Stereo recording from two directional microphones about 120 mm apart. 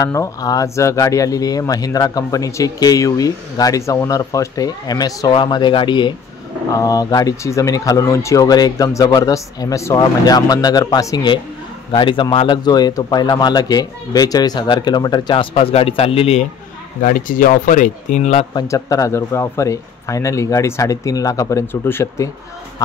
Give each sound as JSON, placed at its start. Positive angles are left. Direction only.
{"t": 0.0, "sound": "speech", "side_deg": 30}
{"t": 6.7, "sound": "speech", "side_deg": 30}
{"t": 11.9, "sound": "speech", "side_deg": 45}
{"t": 15.5, "sound": "speech", "side_deg": 55}
{"t": 17.3, "sound": "speech", "side_deg": 90}
{"t": 18.5, "sound": "speech", "side_deg": 30}